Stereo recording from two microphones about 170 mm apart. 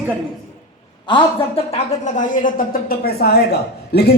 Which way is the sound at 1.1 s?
35° left (ahead or behind).